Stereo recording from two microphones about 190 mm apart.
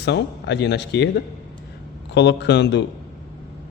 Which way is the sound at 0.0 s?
60° left (ahead or behind).